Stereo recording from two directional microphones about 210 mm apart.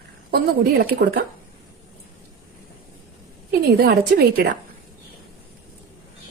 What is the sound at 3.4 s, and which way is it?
A woman's voice, 50° right (ahead or behind).